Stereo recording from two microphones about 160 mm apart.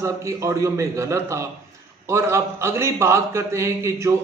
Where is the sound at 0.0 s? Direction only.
20° right (ahead or behind).